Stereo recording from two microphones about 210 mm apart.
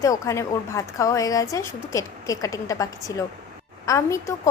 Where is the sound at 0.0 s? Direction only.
15° left (ahead or behind).